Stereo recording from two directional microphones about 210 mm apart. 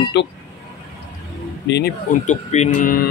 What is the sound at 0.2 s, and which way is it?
Speech, 55° left (ahead or behind).